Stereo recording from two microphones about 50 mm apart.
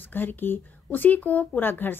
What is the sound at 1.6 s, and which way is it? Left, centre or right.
Speech, left.